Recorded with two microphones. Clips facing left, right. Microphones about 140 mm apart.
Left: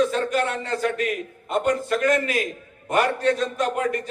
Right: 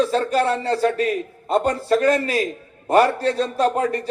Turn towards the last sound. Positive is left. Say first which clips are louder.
# right 4 dB
turn(degrees=-35)  # may be behind; listen again after turning